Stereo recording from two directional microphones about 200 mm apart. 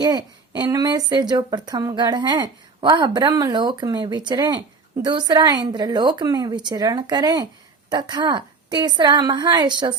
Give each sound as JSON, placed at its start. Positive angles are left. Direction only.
{"t": 0.0, "sound": "a woman's voice", "side_deg": -20}